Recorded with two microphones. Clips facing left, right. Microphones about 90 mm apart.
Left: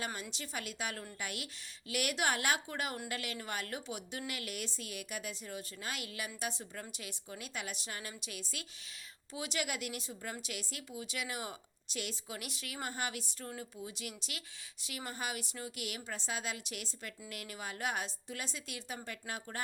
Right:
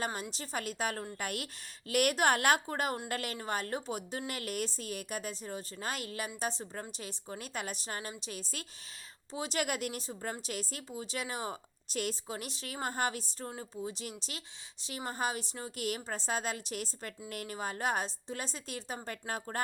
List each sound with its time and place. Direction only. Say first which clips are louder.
0.0 s a woman's voice: right 4 dB; 40° right (ahead or behind)